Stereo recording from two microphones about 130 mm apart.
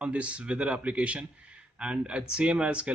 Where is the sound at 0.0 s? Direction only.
10° right (ahead or behind).